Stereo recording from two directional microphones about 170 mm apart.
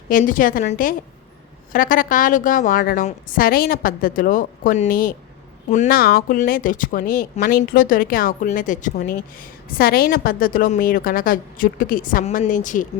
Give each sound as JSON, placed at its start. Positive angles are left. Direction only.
{"t": 0.1, "sound": "a woman's voice", "side_deg": 50}
{"t": 5.6, "sound": "a woman's voice", "side_deg": 45}
{"t": 6.0, "sound": "a woman's voice", "side_deg": 65}